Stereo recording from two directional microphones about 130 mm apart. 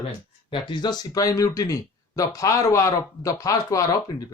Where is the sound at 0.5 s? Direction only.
35° left (ahead or behind).